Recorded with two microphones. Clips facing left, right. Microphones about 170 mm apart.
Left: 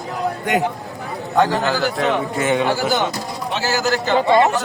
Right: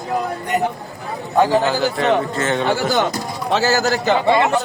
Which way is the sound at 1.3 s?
10° right (ahead or behind).